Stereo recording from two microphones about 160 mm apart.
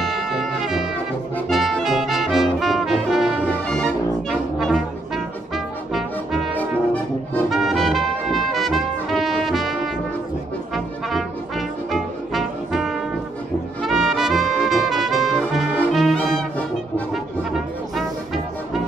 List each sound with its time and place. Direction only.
0.0 s brass instrument: centre (ahead or behind)
6.5 s brass instrument: 10° left (ahead or behind)
7.4 s trumpet: centre (ahead or behind)
10.7 s brass instrument: centre (ahead or behind)
17.1 s music: centre (ahead or behind)